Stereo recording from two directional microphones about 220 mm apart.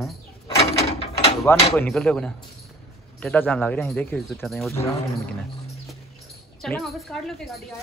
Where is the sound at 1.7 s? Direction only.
10° left (ahead or behind).